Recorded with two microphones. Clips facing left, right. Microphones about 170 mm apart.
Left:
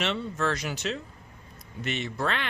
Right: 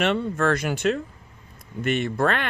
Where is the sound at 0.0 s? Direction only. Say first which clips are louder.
Right 6 dB; 55° right (ahead or behind).